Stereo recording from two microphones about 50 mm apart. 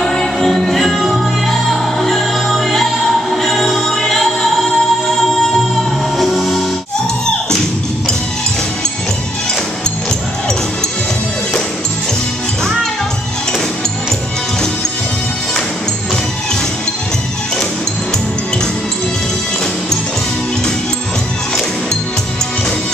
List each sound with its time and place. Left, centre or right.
0.0 s music: centre
6.1 s music: centre